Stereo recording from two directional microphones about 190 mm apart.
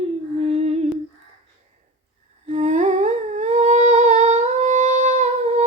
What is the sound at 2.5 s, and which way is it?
Humming, 40° right (ahead or behind).